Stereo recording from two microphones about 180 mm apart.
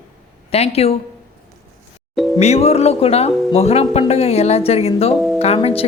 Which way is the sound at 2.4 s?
35° left (ahead or behind).